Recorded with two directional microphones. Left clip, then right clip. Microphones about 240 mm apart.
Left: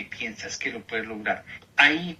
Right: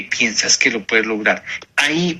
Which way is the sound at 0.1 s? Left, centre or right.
Right.